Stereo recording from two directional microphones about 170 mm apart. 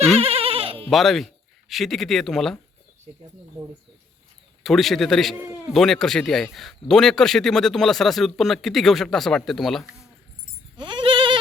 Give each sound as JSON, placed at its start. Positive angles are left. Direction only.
{"t": 0.2, "sound": "bleat", "side_deg": -35}
{"t": 0.9, "sound": "speech", "side_deg": 0}
{"t": 4.6, "sound": "a man's voice", "side_deg": 0}
{"t": 10.8, "sound": "bleat", "side_deg": -30}